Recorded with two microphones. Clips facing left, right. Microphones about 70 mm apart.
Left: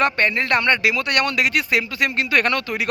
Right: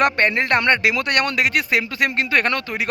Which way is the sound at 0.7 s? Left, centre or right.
Right.